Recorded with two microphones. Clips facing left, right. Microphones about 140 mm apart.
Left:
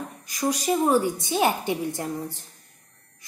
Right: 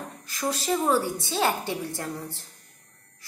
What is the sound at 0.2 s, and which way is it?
A woman's voice, 15° left (ahead or behind).